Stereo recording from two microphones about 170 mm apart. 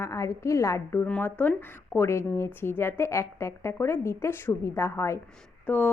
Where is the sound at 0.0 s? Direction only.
15° left (ahead or behind).